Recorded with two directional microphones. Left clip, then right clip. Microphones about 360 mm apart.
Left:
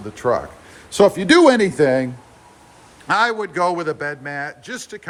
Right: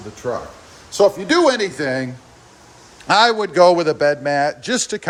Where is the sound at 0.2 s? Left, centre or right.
Centre.